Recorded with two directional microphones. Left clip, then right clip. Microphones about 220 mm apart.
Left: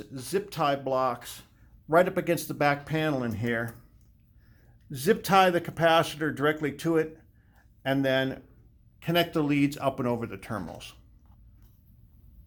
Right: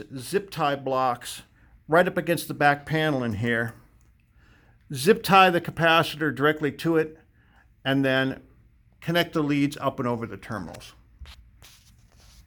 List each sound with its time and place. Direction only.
0.0 s speech: 25° right (ahead or behind)
4.9 s speech: 35° right (ahead or behind)